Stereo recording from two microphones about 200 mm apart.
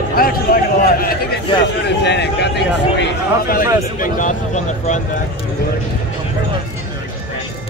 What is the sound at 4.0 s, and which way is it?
Speech, 40° left (ahead or behind).